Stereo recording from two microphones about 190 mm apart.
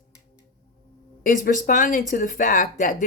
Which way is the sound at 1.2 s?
45° left (ahead or behind).